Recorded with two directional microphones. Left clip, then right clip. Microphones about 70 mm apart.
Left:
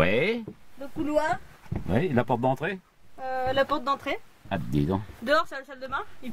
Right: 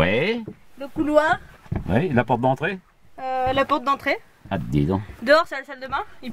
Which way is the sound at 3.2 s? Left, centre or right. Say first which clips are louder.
Right 4 dB; right.